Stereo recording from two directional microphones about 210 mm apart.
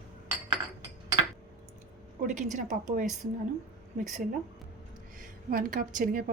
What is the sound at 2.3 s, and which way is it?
Speech, 35° right (ahead or behind).